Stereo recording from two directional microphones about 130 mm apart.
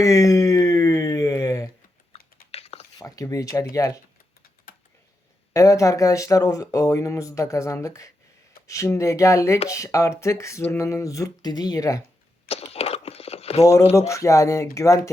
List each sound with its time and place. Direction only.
0.0 s a sound: 25° left (ahead or behind)
2.1 s chewing: 45° left (ahead or behind)
2.5 s a sound: 50° left (ahead or behind)
3.0 s speech: 25° left (ahead or behind)
4.7 s typing: 90° left
5.5 s speech: 25° left (ahead or behind)
12.7 s crumpling: 50° left (ahead or behind)
14.1 s speech: 25° left (ahead or behind)